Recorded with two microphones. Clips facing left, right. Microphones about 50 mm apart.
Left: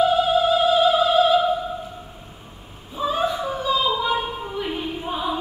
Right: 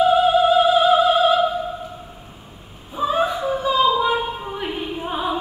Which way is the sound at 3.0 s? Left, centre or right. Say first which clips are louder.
Right 3 dB; centre.